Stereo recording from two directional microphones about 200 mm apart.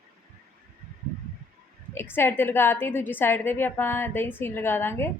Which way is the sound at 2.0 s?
10° left (ahead or behind).